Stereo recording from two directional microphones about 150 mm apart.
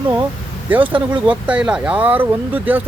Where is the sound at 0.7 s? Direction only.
10° right (ahead or behind).